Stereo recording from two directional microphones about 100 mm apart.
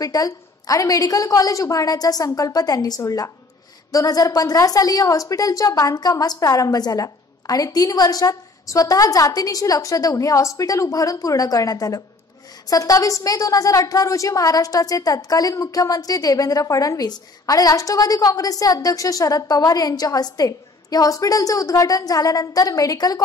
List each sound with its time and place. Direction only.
0.0 s a woman's voice: 35° left (ahead or behind)